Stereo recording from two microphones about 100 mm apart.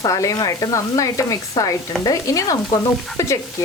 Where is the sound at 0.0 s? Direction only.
35° left (ahead or behind).